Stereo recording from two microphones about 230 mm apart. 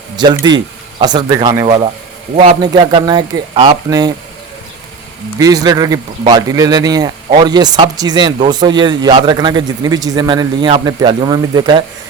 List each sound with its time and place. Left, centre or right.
0.4 s speech: centre
5.4 s speech: centre